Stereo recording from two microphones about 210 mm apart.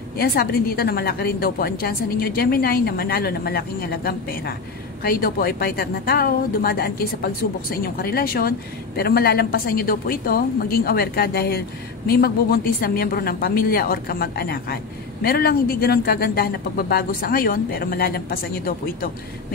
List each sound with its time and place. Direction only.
0.2 s a woman's voice: 45° left (ahead or behind)